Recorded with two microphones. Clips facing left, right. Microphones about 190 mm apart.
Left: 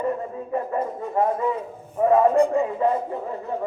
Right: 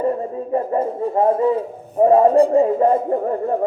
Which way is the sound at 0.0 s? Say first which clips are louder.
Right 5 dB; 35° right (ahead or behind).